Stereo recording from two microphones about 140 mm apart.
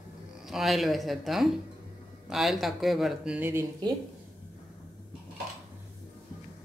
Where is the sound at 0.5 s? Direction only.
Centre (ahead or behind).